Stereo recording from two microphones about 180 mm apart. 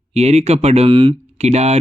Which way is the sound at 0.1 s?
35° right (ahead or behind).